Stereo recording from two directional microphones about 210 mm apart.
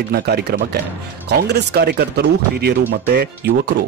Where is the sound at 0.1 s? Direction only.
50° right (ahead or behind).